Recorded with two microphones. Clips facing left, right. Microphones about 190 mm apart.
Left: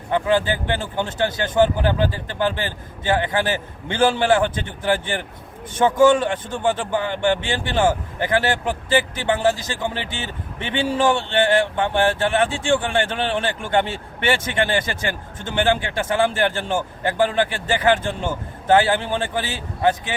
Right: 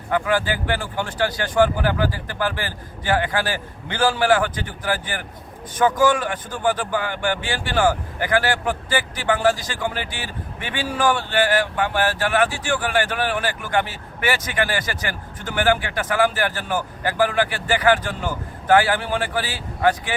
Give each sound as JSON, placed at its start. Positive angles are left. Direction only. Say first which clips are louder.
{"t": 0.1, "sound": "speech", "louder": "left 2 dB", "side_deg": 25}